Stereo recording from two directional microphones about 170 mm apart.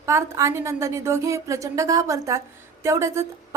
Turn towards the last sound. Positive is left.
turn(degrees=-15)  # may be behind; listen again after turning